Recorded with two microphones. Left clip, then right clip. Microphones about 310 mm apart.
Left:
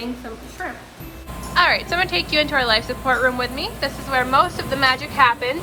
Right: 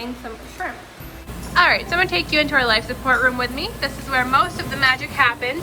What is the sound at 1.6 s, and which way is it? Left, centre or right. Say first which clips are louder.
A woman's voice: right 1 dB; centre.